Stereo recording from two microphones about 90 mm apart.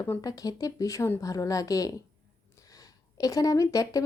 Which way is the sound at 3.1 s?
40° left (ahead or behind).